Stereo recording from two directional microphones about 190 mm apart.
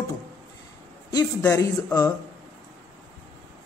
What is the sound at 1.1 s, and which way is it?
A man's voice, 20° left (ahead or behind).